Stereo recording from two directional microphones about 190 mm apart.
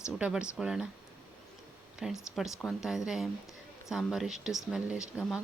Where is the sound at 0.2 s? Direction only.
5° right (ahead or behind).